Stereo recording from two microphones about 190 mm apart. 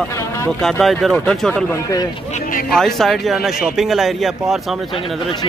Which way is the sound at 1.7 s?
15° left (ahead or behind).